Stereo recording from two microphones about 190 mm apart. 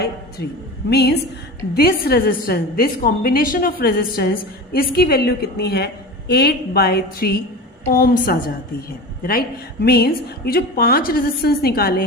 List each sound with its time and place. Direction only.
0.4 s a woman's voice: 55° left (ahead or behind)
9.8 s a woman's voice: 55° left (ahead or behind)